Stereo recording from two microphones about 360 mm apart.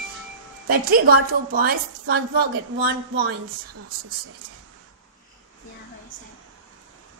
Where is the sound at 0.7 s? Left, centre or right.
Right.